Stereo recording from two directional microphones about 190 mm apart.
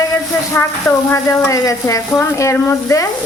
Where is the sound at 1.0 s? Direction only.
15° left (ahead or behind).